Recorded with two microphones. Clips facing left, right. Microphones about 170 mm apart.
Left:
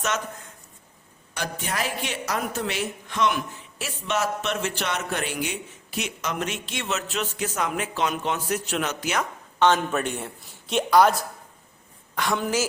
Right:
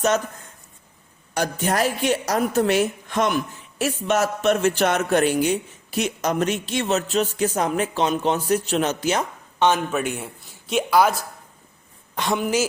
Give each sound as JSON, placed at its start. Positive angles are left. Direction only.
{"t": 1.3, "sound": "a woman's voice", "side_deg": -45}
{"t": 9.6, "sound": "speech", "side_deg": -10}
{"t": 12.1, "sound": "a woman's voice", "side_deg": -20}